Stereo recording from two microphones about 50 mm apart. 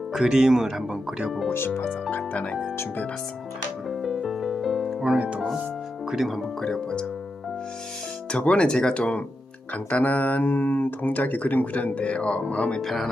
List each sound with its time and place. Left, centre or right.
0.1 s speech: centre
1.5 s speech: left
2.1 s speech: left
3.8 s music: centre
5.1 s speech: right
6.1 s speech: centre
8.3 s speech: left
12.8 s speech: centre